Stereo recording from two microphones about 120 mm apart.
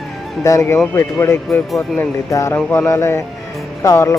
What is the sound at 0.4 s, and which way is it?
Speech, 25° left (ahead or behind).